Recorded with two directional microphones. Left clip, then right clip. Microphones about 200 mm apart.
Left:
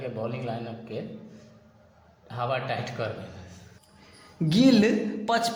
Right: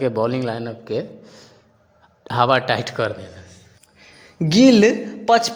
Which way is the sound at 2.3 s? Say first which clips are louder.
Right 12 dB; 60° right (ahead or behind).